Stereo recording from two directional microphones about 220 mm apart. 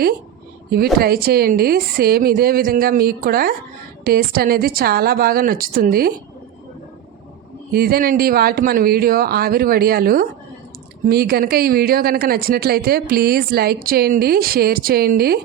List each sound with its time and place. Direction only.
0.9 s speech: 45° right (ahead or behind)
7.7 s speech: 45° right (ahead or behind)